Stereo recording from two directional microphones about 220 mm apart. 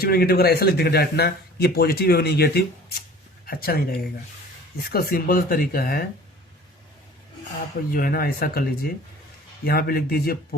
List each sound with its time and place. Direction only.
0.0 s speech: 45° left (ahead or behind)
4.9 s speech: 45° left (ahead or behind)
7.9 s speech: 40° left (ahead or behind)